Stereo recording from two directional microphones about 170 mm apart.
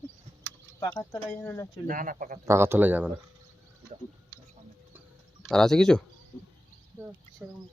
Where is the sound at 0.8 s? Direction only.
20° left (ahead or behind).